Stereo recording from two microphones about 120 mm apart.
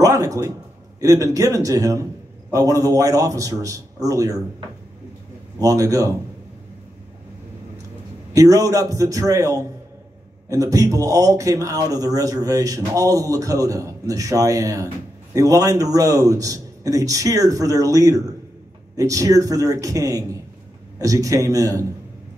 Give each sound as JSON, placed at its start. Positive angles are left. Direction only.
{"t": 0.0, "sound": "a sound", "side_deg": -30}
{"t": 1.0, "sound": "speech", "side_deg": -30}
{"t": 8.3, "sound": "speech", "side_deg": -25}